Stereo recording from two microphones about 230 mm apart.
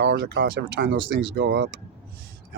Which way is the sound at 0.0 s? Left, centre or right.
Right.